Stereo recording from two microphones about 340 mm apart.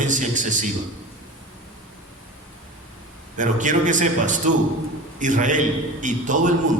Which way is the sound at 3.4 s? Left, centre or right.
Right.